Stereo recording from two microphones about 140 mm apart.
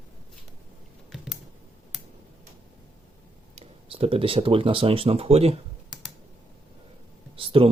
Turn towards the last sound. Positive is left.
turn(degrees=-40)  # may be behind; listen again after turning